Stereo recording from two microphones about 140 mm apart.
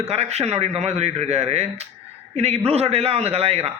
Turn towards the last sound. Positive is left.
turn(degrees=-45)  # may be behind; listen again after turning